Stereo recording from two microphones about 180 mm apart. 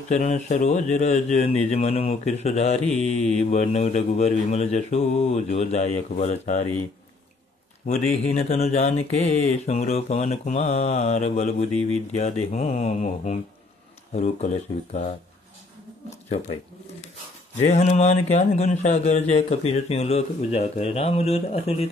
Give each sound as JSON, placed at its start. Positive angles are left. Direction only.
{"t": 0.1, "sound": "speech", "side_deg": 40}
{"t": 7.8, "sound": "speech", "side_deg": 40}
{"t": 17.6, "sound": "speech", "side_deg": 40}